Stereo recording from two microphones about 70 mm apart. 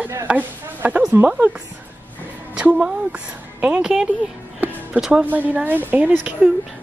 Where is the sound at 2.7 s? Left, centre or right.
Centre.